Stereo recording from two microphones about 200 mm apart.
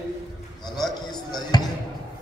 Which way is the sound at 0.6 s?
Centre (ahead or behind).